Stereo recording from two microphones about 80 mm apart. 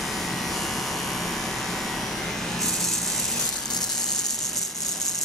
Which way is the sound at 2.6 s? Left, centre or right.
Centre.